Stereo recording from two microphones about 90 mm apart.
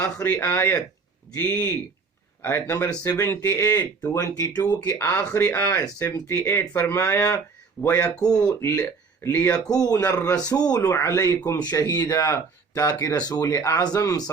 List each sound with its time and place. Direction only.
0.0 s speech: 30° left (ahead or behind)
1.3 s speech: 40° left (ahead or behind)
2.4 s speech: 25° left (ahead or behind)
2.8 s speech: 40° left (ahead or behind)
4.9 s speech: 25° left (ahead or behind)
6.5 s speech: 20° left (ahead or behind)
6.9 s speech: 30° left (ahead or behind)
8.6 s speech: 35° left (ahead or behind)
9.3 s speech: 20° left (ahead or behind)
9.6 s speech: 45° left (ahead or behind)
12.0 s speech: 30° left (ahead or behind)